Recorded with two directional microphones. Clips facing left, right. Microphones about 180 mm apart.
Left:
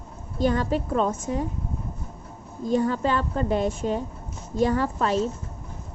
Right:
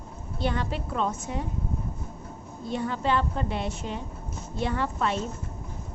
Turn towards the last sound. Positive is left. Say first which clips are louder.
# left 4 dB
turn(degrees=40)  # may be behind; listen again after turning